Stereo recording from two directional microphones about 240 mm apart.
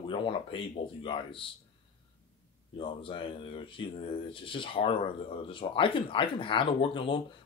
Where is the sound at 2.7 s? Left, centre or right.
Left.